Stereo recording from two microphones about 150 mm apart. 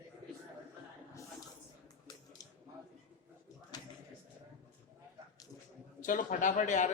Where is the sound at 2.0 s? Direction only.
25° left (ahead or behind).